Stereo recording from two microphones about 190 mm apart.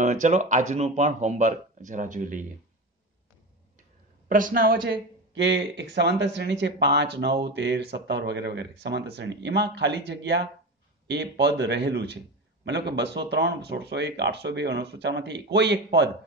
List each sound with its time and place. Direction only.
0.0 s speech: 40° right (ahead or behind)
4.3 s speech: 45° right (ahead or behind); by 16.1 s 65° right (ahead or behind)